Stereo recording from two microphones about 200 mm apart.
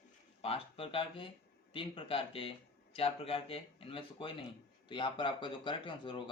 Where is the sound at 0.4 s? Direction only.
30° left (ahead or behind).